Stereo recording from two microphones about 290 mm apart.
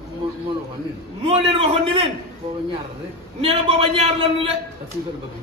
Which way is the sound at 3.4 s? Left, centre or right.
Centre.